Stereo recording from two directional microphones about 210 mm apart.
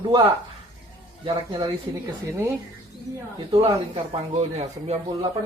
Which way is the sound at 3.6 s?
30° right (ahead or behind).